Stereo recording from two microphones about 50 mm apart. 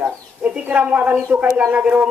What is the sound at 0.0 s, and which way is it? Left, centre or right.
Bird, right.